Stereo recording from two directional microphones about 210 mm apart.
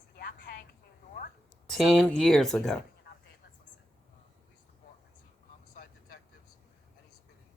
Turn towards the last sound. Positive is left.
turn(degrees=45)  # may be behind; listen again after turning